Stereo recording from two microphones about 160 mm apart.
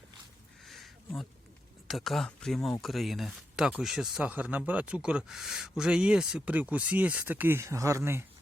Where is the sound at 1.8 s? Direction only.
Centre (ahead or behind).